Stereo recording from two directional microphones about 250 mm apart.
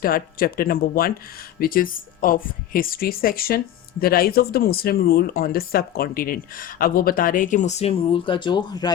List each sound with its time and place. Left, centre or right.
0.0 s speech: left; by 8.9 s centre